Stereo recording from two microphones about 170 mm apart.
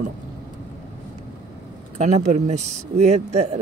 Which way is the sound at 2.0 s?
45° right (ahead or behind).